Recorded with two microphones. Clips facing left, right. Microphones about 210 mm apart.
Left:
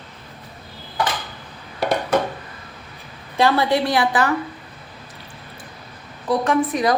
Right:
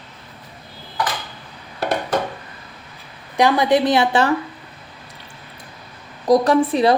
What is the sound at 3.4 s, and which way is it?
Speech, 15° right (ahead or behind).